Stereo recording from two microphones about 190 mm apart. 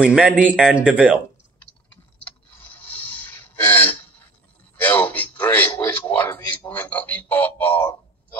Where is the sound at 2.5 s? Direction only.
10° left (ahead or behind).